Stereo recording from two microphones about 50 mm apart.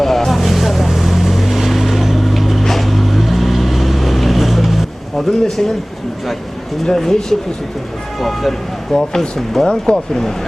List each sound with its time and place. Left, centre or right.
0.0 s vehicle: centre
6.8 s speech: centre